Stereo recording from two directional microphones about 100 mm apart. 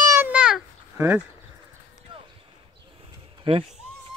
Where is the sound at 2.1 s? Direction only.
55° right (ahead or behind).